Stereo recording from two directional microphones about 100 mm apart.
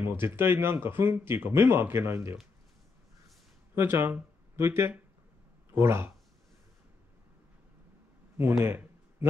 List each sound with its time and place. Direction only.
0.0 s speech: 25° right (ahead or behind)
3.7 s speech: 25° right (ahead or behind)
8.6 s a sound: 25° right (ahead or behind)